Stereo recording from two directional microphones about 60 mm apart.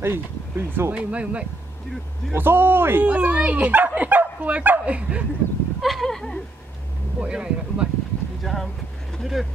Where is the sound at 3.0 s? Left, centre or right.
Right.